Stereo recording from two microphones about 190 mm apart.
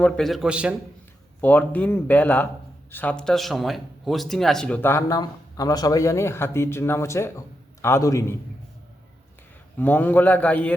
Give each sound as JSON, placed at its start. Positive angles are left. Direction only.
{"t": 0.0, "sound": "a man's voice", "side_deg": 0}
{"t": 1.4, "sound": "speech", "side_deg": 10}
{"t": 9.7, "sound": "speech", "side_deg": 10}